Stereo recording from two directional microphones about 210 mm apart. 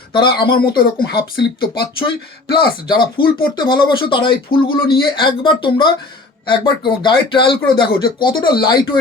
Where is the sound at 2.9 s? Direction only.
20° left (ahead or behind).